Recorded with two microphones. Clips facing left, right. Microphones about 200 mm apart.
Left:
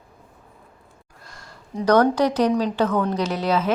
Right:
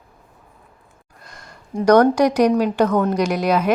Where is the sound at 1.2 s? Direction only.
15° right (ahead or behind).